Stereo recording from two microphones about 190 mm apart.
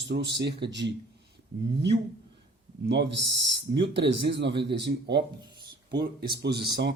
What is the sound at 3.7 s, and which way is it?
Speech, 65° right (ahead or behind).